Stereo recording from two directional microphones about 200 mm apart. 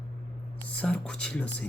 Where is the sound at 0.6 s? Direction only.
5° left (ahead or behind).